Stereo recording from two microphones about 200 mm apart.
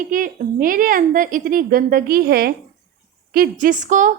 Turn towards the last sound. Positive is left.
turn(degrees=-40)  # may be behind; listen again after turning